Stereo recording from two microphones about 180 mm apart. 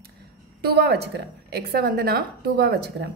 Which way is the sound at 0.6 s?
65° right (ahead or behind).